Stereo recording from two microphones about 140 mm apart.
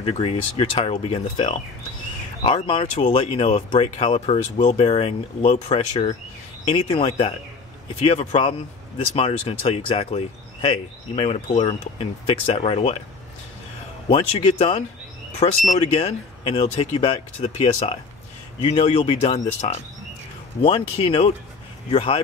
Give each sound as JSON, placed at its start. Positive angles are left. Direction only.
{"t": 0.0, "sound": "speech", "side_deg": 45}
{"t": 14.0, "sound": "speech", "side_deg": 40}